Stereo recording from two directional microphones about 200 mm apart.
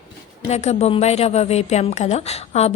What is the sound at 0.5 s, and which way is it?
A woman's voice, 35° left (ahead or behind).